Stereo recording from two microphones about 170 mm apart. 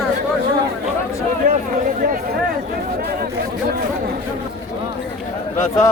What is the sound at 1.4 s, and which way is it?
Chatter, 50° right (ahead or behind).